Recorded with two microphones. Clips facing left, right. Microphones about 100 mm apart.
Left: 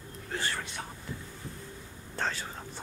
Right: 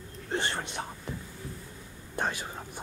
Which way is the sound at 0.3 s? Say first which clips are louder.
Right 3 dB; 25° right (ahead or behind).